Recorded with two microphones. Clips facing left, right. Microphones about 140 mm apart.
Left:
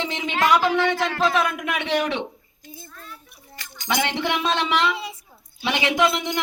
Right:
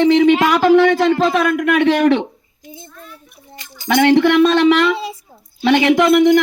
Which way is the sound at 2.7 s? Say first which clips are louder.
Right 5 dB; 25° right (ahead or behind).